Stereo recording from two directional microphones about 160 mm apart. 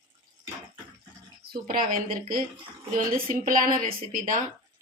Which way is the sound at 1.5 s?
60° right (ahead or behind).